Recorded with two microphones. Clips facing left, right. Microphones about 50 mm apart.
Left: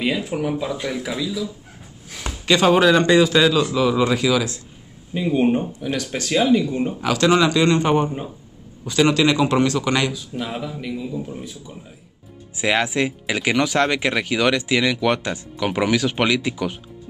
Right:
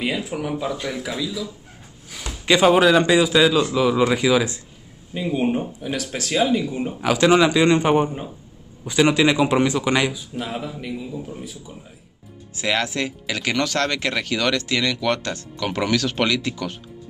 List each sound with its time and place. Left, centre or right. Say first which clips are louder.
0.0 s a man's voice: left 3 dB; centre
2.4 s a man's voice: even; centre
5.1 s speech: left 3 dB; centre
5.5 s a man's voice: left 3 dB; centre
7.0 s a man's voice: right 2 dB; centre
10.3 s a man's voice: left 1 dB; centre
12.5 s speech: left 3 dB; centre